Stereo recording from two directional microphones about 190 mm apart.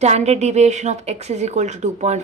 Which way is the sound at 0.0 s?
35° right (ahead or behind).